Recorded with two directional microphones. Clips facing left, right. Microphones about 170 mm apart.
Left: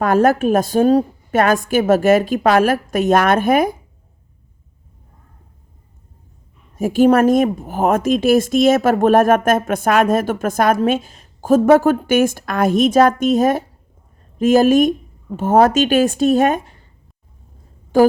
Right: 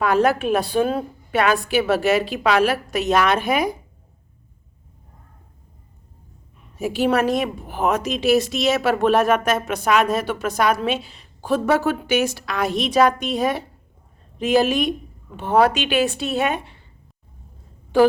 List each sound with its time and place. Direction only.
0.0 s speech: 45° left (ahead or behind)
6.7 s speech: 45° left (ahead or behind)
17.9 s speech: 45° left (ahead or behind)